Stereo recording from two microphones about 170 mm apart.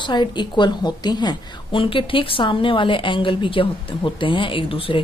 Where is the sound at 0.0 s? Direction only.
25° left (ahead or behind).